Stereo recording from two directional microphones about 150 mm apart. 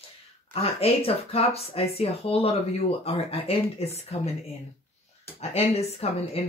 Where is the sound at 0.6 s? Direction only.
40° left (ahead or behind).